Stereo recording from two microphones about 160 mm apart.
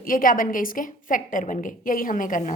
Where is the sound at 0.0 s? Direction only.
60° left (ahead or behind).